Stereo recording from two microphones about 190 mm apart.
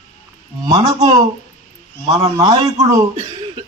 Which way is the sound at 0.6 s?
20° right (ahead or behind).